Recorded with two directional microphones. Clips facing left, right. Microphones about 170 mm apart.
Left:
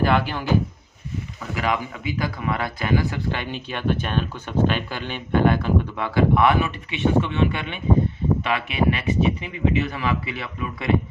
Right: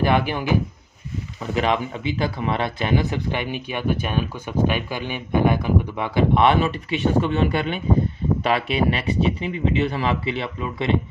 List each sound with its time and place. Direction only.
0.0 s speech: 15° right (ahead or behind)
1.4 s a man's voice: 25° right (ahead or behind)